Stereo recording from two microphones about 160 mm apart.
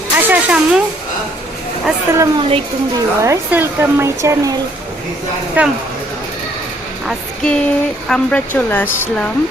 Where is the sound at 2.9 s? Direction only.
20° right (ahead or behind).